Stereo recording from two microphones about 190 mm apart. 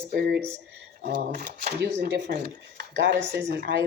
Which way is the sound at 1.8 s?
60° right (ahead or behind).